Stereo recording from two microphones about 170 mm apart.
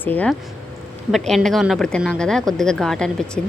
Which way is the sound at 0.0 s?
10° left (ahead or behind).